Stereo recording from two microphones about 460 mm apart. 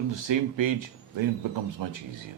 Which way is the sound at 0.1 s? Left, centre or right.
Right.